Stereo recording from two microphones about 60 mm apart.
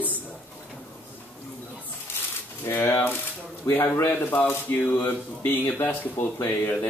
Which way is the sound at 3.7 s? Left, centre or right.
Left.